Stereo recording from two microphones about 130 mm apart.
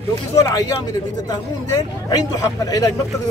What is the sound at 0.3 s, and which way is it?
A man's voice, 25° left (ahead or behind).